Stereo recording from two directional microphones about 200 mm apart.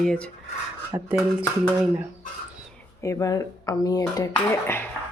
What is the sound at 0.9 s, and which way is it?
Speech, 15° right (ahead or behind).